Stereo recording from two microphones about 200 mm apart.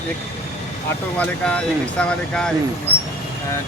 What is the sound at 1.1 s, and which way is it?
Speech, 5° left (ahead or behind).